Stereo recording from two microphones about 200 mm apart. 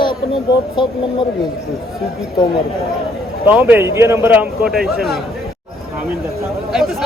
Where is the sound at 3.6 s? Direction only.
10° right (ahead or behind).